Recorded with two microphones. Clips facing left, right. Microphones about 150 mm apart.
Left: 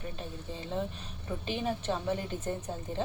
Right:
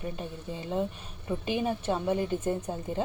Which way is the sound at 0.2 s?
15° right (ahead or behind).